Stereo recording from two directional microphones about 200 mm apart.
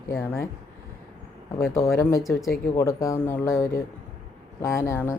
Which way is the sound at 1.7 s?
15° left (ahead or behind).